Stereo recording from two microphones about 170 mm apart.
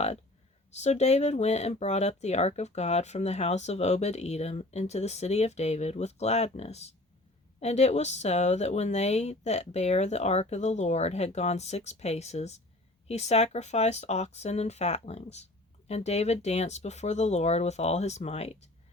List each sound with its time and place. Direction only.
0.7 s speech: 40° left (ahead or behind)